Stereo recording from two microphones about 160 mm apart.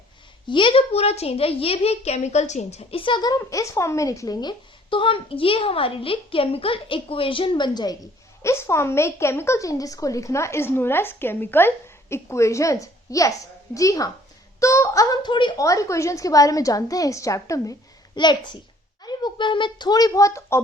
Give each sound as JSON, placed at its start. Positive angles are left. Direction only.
{"t": 0.4, "sound": "a woman's voice", "side_deg": 30}